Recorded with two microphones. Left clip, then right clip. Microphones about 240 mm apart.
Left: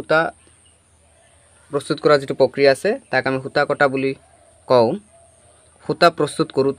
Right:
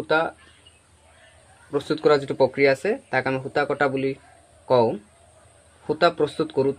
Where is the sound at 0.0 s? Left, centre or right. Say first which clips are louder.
Left 4 dB; left.